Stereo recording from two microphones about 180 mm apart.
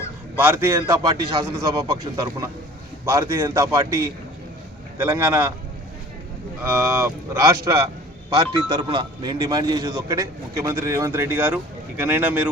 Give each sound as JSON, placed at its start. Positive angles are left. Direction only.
{"t": 0.3, "sound": "a man's voice", "side_deg": -10}
{"t": 3.1, "sound": "a man's voice", "side_deg": -15}
{"t": 6.6, "sound": "a man's voice", "side_deg": -15}